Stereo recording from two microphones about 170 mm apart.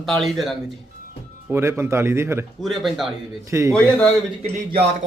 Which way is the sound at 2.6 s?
Centre (ahead or behind).